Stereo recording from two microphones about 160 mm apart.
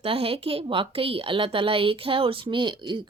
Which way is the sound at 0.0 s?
35° right (ahead or behind).